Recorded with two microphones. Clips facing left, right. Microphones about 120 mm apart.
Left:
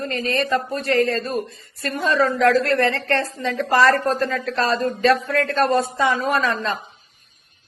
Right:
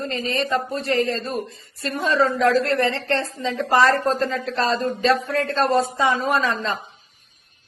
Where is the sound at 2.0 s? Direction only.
90° left.